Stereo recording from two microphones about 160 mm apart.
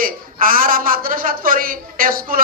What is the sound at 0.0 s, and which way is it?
A woman's voice, 60° right (ahead or behind).